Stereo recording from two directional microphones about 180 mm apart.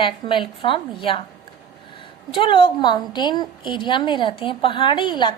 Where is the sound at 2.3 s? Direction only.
30° left (ahead or behind).